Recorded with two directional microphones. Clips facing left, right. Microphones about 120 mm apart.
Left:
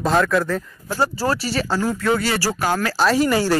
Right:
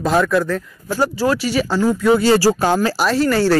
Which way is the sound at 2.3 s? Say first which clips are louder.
Right 6 dB; 20° right (ahead or behind).